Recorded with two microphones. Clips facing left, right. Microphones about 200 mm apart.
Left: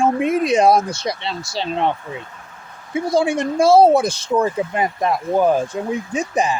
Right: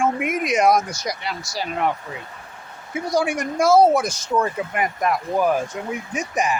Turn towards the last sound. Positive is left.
turn(degrees=30)  # may be behind; listen again after turning